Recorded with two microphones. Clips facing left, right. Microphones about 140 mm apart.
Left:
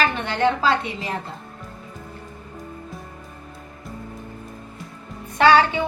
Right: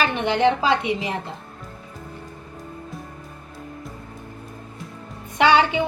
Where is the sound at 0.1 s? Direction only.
15° right (ahead or behind).